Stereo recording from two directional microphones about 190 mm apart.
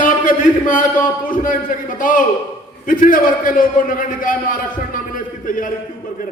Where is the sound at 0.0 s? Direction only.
45° left (ahead or behind).